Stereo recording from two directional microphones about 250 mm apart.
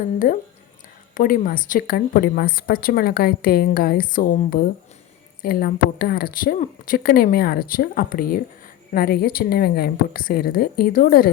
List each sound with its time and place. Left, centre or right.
0.0 s speech: left